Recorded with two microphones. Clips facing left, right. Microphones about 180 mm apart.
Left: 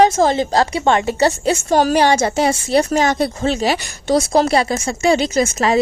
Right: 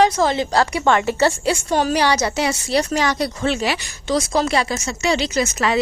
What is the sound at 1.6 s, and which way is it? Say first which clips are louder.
Speech: left 5 dB; 45° left (ahead or behind).